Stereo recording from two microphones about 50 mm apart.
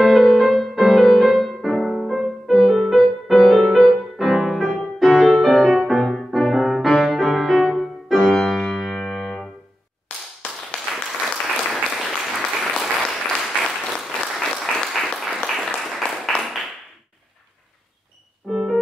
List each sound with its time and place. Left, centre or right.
0.0 s music: centre
10.0 s clapping: centre
11.5 s applause: centre
16.1 s a sound: centre
18.5 s music: centre